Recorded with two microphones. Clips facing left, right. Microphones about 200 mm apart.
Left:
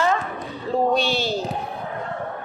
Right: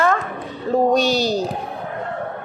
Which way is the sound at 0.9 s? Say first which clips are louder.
Right 4 dB; 40° right (ahead or behind).